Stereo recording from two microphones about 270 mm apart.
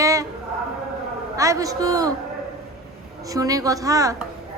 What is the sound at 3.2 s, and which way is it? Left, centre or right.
A woman's voice, centre.